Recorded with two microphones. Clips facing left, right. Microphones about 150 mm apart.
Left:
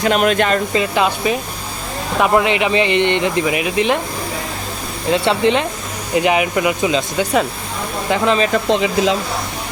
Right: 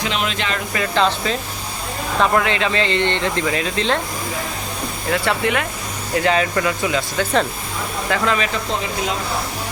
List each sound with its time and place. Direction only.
0.0 s speech: 50° left (ahead or behind)
0.7 s speech: 15° left (ahead or behind)
5.1 s speech: 20° left (ahead or behind)
8.7 s speech: 90° left